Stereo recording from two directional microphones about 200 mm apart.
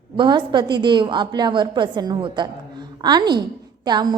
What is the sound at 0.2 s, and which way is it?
A woman's voice, 25° right (ahead or behind).